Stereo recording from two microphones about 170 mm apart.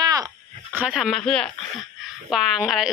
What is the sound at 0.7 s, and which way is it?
Speech, 5° right (ahead or behind).